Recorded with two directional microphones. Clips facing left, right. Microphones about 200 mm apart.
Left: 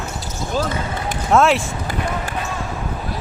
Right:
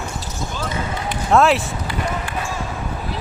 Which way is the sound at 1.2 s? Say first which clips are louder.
Even; centre (ahead or behind).